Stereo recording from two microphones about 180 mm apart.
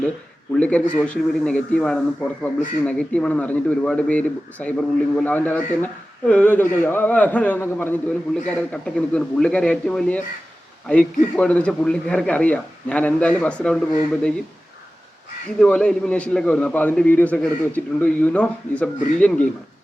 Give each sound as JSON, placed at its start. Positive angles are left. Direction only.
{"t": 0.6, "sound": "a man's voice", "side_deg": 5}
{"t": 15.6, "sound": "a man's voice", "side_deg": 5}